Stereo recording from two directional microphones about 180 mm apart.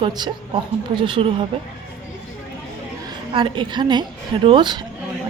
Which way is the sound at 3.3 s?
25° right (ahead or behind).